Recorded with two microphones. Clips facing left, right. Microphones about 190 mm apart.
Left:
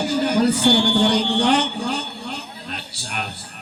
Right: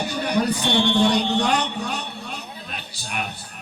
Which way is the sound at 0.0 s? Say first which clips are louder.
Left 4 dB; 70° left (ahead or behind).